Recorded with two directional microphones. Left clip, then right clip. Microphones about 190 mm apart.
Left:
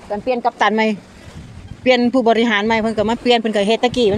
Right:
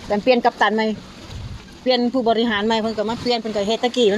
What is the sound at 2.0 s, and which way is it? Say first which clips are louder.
Speech: left 4 dB; 20° left (ahead or behind).